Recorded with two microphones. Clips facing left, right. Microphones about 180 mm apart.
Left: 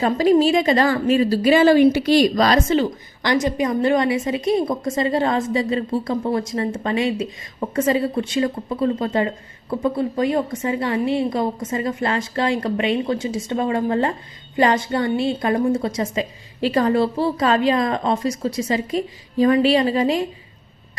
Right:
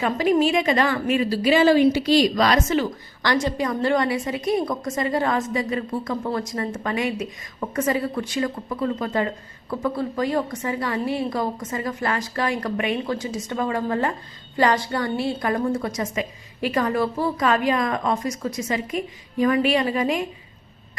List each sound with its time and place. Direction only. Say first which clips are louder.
0.0 s a woman's voice: left 4 dB; 35° left (ahead or behind); by 2.3 s 55° left (ahead or behind)
2.3 s a woman's voice: left 3 dB; 35° left (ahead or behind)